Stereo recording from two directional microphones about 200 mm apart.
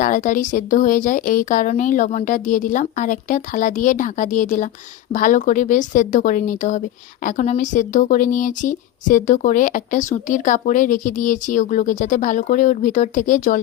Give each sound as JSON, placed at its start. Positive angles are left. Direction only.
{"t": 0.0, "sound": "speech", "side_deg": 40}